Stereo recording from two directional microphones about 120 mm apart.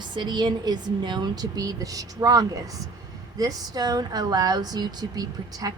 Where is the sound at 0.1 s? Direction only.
35° right (ahead or behind).